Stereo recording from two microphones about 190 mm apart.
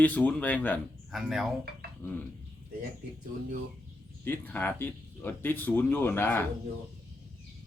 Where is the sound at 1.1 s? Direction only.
Centre (ahead or behind).